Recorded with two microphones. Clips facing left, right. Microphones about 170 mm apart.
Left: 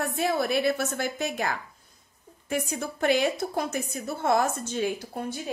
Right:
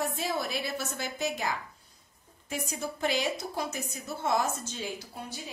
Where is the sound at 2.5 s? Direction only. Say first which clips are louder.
Left 5 dB; 55° left (ahead or behind).